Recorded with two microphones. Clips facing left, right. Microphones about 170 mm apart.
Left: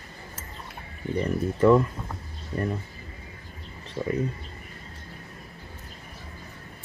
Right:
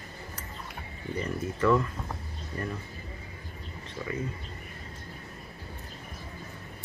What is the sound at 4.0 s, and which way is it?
Speech, 30° left (ahead or behind).